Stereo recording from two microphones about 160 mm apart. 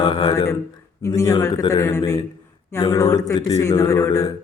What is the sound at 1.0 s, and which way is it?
A man's voice, 20° left (ahead or behind).